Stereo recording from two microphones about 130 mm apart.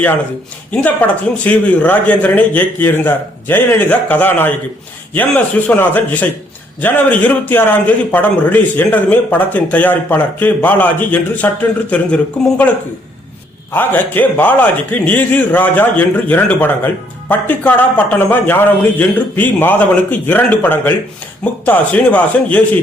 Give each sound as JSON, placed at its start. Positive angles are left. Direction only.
{"t": 0.7, "sound": "a man's voice", "side_deg": 10}
{"t": 13.7, "sound": "a man's voice", "side_deg": 15}